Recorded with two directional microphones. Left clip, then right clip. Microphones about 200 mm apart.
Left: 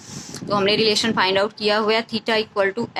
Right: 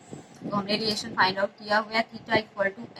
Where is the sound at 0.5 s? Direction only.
25° left (ahead or behind).